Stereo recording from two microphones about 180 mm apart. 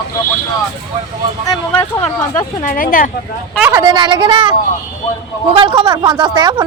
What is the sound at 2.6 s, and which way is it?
Speech, 50° left (ahead or behind).